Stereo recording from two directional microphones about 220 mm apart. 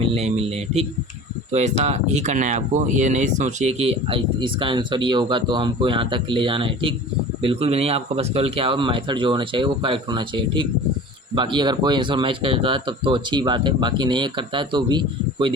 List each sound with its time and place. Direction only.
0.0 s speech: 30° right (ahead or behind)